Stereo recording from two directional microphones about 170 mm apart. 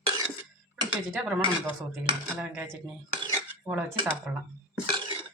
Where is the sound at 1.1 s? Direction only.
Centre (ahead or behind).